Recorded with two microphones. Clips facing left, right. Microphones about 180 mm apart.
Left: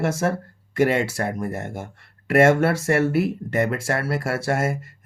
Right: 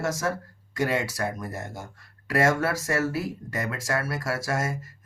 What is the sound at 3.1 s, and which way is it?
Speech, 65° left (ahead or behind).